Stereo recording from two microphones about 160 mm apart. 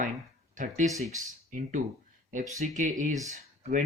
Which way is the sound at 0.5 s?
50° right (ahead or behind).